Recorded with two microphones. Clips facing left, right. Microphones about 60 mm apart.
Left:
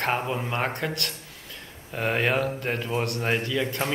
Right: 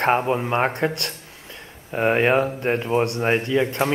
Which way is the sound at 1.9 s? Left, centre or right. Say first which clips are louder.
Right 6 dB; right.